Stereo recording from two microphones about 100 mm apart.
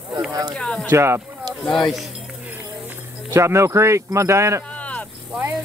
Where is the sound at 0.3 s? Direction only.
40° right (ahead or behind).